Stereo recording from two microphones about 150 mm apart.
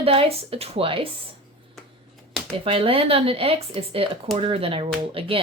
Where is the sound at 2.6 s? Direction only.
40° right (ahead or behind).